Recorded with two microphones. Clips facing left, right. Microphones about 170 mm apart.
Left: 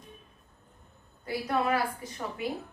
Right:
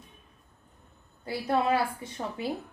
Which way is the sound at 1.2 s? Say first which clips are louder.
Right 2 dB; 30° right (ahead or behind).